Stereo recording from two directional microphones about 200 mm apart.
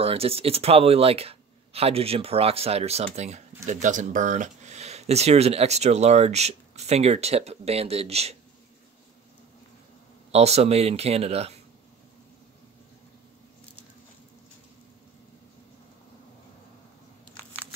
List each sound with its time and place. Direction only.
0.0 s speech: 30° right (ahead or behind)
10.3 s speech: 30° right (ahead or behind)
17.4 s a sound: 10° left (ahead or behind)